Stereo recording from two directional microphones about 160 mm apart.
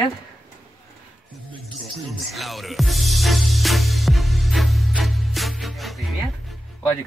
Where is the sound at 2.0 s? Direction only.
Centre (ahead or behind).